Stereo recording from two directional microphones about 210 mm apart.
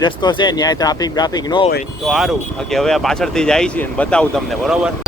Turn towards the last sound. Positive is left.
turn(degrees=0)  # may be behind; listen again after turning